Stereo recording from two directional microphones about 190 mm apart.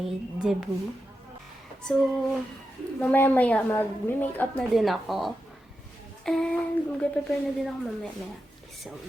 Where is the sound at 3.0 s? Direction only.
10° left (ahead or behind).